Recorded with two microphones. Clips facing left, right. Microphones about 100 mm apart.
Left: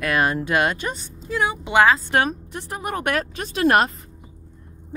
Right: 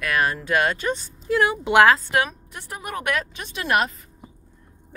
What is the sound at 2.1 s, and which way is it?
A woman's voice, 35° left (ahead or behind).